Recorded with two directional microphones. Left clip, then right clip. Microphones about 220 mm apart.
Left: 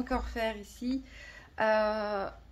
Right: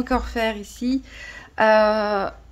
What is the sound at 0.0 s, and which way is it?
A woman's voice, 40° right (ahead or behind).